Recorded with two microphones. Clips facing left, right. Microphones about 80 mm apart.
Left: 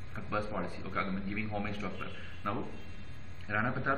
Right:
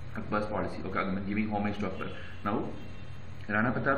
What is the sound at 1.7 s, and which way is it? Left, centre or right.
Speech, centre.